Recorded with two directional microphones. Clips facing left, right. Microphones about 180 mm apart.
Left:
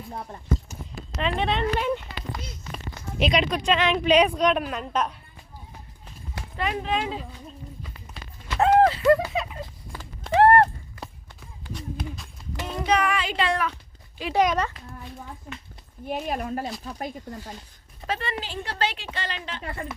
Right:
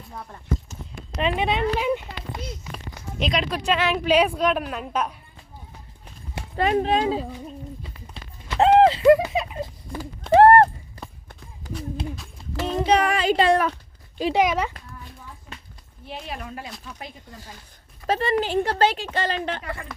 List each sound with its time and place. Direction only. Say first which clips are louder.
0.1 s speech: left 2 dB; 30° left (ahead or behind)
0.7 s a sound: even; 10° left (ahead or behind)
1.1 s speech: right 2 dB; 10° right (ahead or behind)
2.7 s speech: left 6 dB; centre (ahead or behind)
6.3 s speech: right 7 dB; 35° right (ahead or behind)
7.9 s horse: right 1 dB; 25° right (ahead or behind)
9.1 s a sound: right 3 dB; 15° right (ahead or behind)
10.3 s a sound: right 4 dB; 40° right (ahead or behind)
12.6 s child singing: right 4 dB; 30° right (ahead or behind)
14.3 s speech: even; 10° right (ahead or behind)
16.0 s speech: left 6 dB; 45° left (ahead or behind)
18.1 s speech: right 8 dB; 40° right (ahead or behind)
18.4 s a woman's voice: right 8 dB; 50° right (ahead or behind)